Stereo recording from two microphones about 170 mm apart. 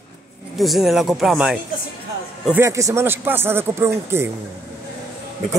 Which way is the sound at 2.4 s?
10° right (ahead or behind).